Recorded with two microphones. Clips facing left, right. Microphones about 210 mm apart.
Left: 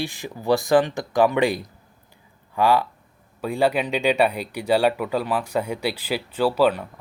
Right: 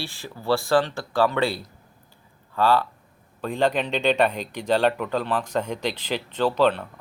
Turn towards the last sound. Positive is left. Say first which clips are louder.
# left 1 dB
turn(degrees=10)  # may be behind; listen again after turning